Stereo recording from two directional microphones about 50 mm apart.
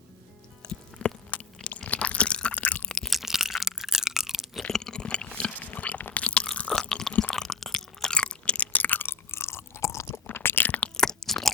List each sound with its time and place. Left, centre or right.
1.0 s a sound: left
1.9 s crunch: left
2.9 s crunch: centre
3.2 s crunch: centre
4.7 s chewing: centre
5.5 s biting: left
6.1 s crunch: left
7.2 s chewing: centre
8.1 s chewing: centre; by 9.1 s left
9.3 s chewing: left
10.1 s a sound: left
10.9 s crunch: centre